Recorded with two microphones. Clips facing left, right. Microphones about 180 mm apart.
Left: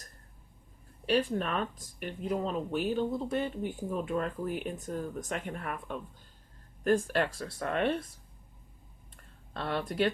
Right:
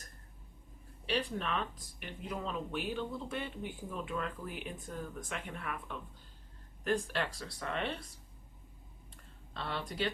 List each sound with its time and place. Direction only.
1.0 s speech: 45° left (ahead or behind)
9.5 s speech: 50° left (ahead or behind)